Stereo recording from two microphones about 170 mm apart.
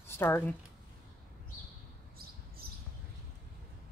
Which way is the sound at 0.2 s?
10° left (ahead or behind).